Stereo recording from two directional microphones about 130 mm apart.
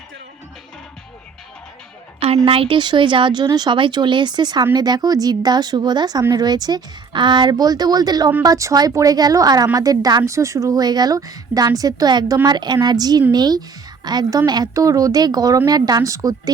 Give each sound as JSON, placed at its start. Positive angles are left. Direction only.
{"t": 2.2, "sound": "a woman's voice", "side_deg": -50}